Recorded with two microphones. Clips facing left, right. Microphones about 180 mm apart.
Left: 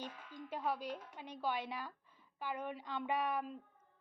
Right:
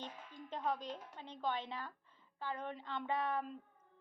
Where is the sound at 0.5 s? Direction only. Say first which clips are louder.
Even; 10° left (ahead or behind).